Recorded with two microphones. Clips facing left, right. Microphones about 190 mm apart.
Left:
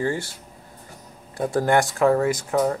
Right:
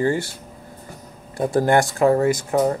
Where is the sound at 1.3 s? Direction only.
25° right (ahead or behind).